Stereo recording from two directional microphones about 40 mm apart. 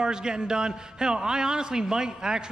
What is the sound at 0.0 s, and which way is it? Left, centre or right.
A man's voice, centre.